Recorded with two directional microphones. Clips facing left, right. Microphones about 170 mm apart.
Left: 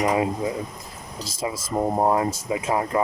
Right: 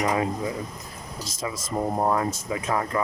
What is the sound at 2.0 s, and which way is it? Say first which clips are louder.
Speech: left 3 dB; 25° left (ahead or behind).